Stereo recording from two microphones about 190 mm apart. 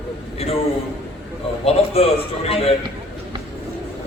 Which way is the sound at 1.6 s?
35° left (ahead or behind).